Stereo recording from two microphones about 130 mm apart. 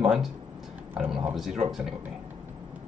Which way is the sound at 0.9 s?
10° right (ahead or behind).